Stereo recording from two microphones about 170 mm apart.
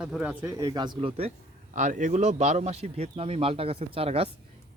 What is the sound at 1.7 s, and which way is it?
A man's voice, 45° right (ahead or behind).